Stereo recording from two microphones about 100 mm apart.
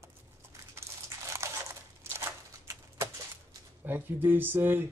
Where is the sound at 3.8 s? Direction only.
20° right (ahead or behind).